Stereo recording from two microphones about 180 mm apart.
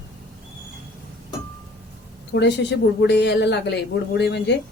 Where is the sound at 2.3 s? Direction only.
70° left (ahead or behind).